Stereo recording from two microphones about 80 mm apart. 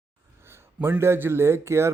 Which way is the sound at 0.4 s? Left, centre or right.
Right.